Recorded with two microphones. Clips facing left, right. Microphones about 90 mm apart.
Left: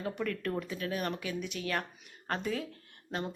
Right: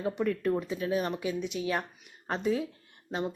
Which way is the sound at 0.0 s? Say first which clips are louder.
Right 5 dB; 15° right (ahead or behind).